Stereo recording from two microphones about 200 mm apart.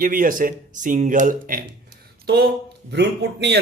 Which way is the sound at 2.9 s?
55° right (ahead or behind).